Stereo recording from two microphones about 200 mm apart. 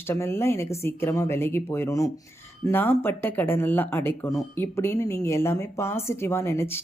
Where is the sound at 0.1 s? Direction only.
10° left (ahead or behind).